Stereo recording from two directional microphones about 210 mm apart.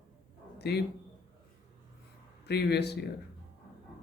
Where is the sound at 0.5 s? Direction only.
50° left (ahead or behind).